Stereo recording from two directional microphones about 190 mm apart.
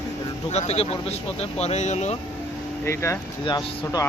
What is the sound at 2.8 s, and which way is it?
Speech, 15° left (ahead or behind).